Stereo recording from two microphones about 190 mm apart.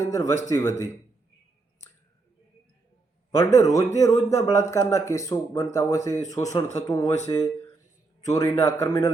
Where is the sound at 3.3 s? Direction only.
15° left (ahead or behind).